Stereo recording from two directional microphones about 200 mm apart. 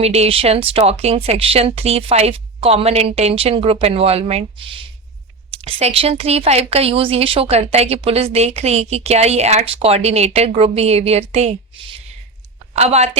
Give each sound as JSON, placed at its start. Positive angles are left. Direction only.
{"t": 0.0, "sound": "speech", "side_deg": -30}